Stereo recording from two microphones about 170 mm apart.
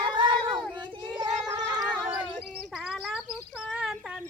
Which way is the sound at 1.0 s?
25° right (ahead or behind).